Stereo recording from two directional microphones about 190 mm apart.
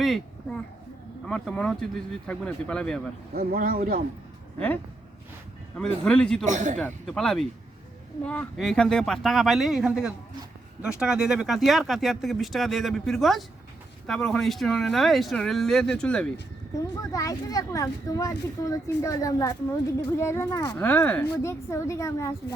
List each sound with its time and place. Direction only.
0.0 s a sound: centre (ahead or behind)
1.3 s speech: 5° left (ahead or behind)
3.3 s speech: 50° right (ahead or behind)
6.1 s speech: 5° left (ahead or behind)
6.4 s a man's voice: 40° right (ahead or behind)
6.7 s speech: 5° left (ahead or behind)
16.7 s speech: 15° left (ahead or behind)